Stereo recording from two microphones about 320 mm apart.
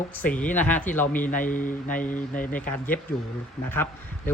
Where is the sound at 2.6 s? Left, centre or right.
Centre.